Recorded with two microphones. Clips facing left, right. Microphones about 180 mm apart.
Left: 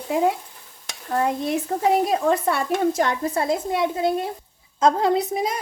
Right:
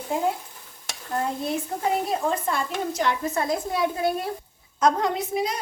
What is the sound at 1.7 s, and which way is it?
A woman's voice, 65° left (ahead or behind).